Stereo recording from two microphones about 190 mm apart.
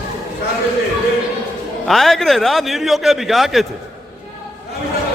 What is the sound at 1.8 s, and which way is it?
A man's voice, centre (ahead or behind).